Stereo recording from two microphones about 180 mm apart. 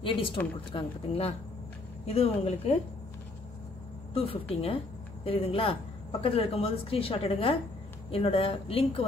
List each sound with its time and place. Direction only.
0.4 s a woman's voice: 10° left (ahead or behind)
0.7 s a woman's voice: 35° left (ahead or behind)
4.1 s a woman's voice: 30° left (ahead or behind)